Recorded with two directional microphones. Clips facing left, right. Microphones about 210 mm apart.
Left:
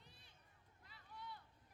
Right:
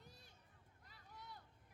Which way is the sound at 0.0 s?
45° right (ahead or behind).